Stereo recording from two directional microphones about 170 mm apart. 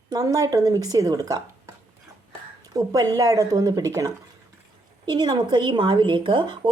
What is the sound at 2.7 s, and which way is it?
Speech, 20° right (ahead or behind).